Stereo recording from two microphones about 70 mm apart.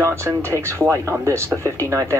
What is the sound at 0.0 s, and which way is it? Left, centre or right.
Speech, right.